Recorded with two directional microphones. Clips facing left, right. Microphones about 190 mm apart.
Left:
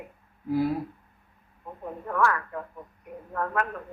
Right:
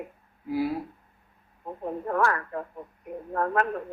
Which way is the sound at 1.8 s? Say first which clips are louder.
Right 1 dB; 35° right (ahead or behind).